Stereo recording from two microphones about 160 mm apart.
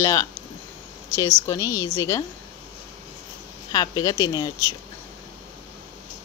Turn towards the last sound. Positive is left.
turn(degrees=20)  # may be behind; listen again after turning